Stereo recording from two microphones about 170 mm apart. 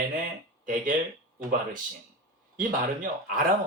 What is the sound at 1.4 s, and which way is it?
Speech, 55° right (ahead or behind).